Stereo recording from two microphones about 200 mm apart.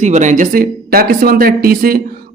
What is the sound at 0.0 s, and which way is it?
A woman's voice, 35° right (ahead or behind).